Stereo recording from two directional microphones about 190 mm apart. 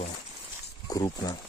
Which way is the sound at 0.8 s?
20° left (ahead or behind).